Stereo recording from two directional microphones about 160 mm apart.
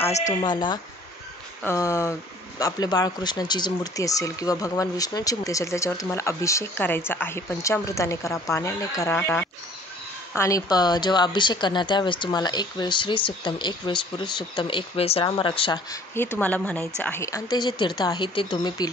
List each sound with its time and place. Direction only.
0.1 s speech: 45° left (ahead or behind)
0.4 s speech: 30° left (ahead or behind)
1.6 s a woman's voice: 15° left (ahead or behind); by 15.8 s 30° left (ahead or behind)
16.3 s a woman's voice: 10° left (ahead or behind); by 18.9 s 25° left (ahead or behind)